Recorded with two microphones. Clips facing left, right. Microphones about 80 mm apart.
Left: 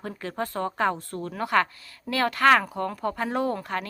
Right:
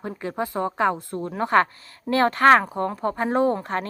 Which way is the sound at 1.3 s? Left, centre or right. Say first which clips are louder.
Right 4 dB; right.